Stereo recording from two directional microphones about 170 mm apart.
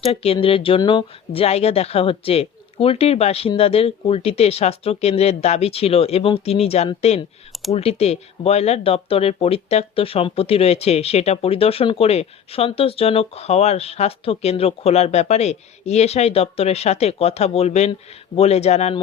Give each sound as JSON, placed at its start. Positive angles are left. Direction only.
{"t": 0.0, "sound": "speech", "side_deg": 35}